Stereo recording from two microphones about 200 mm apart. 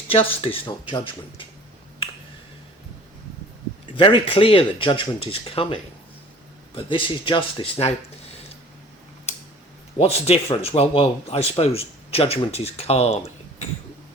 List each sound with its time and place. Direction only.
0.1 s speech: 30° left (ahead or behind)
3.9 s speech: 25° left (ahead or behind)
10.0 s speech: 30° left (ahead or behind)